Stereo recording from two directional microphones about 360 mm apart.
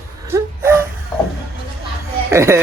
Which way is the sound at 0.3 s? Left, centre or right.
Centre.